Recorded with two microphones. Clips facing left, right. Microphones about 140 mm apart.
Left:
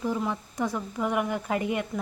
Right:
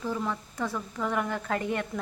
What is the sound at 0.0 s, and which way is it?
Speech, 15° left (ahead or behind).